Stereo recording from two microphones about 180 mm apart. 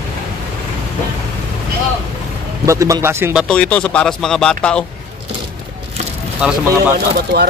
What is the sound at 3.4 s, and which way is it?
Speech, 5° left (ahead or behind).